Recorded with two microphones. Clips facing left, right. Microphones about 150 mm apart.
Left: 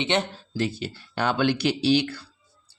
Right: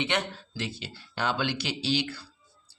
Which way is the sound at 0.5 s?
45° left (ahead or behind).